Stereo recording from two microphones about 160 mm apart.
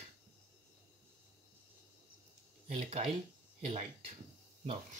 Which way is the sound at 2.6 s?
40° right (ahead or behind).